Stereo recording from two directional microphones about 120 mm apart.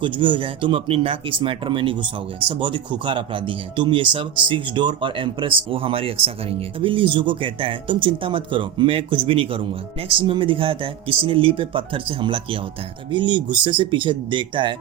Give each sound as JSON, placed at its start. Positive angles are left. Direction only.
{"t": 0.0, "sound": "speech", "side_deg": -45}